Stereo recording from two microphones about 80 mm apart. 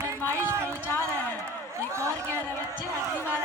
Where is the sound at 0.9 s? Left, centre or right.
Left.